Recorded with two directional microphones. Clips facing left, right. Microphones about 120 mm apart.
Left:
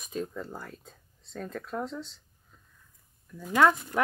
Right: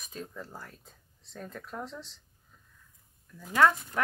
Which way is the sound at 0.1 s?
5° left (ahead or behind).